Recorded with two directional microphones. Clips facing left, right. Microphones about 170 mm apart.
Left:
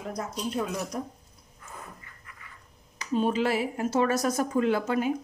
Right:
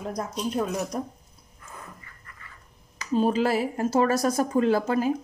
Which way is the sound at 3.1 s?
40° right (ahead or behind).